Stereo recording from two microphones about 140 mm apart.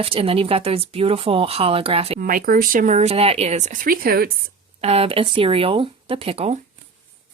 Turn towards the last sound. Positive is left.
turn(degrees=-45)  # may be behind; listen again after turning